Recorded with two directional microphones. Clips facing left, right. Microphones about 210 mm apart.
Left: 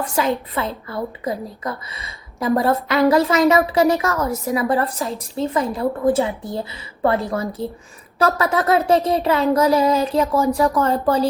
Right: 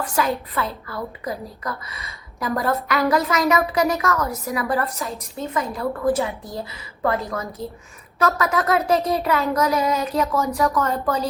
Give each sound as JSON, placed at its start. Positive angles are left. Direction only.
{"t": 0.0, "sound": "a woman's voice", "side_deg": 20}